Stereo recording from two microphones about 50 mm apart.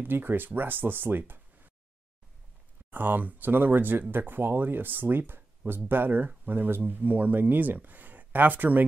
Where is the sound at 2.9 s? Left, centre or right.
Right.